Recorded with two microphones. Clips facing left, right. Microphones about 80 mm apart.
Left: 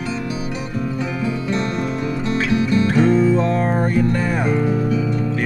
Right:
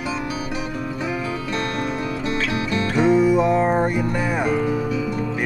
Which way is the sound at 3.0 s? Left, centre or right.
Centre.